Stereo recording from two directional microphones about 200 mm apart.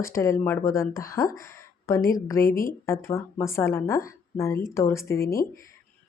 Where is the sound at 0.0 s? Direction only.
15° left (ahead or behind).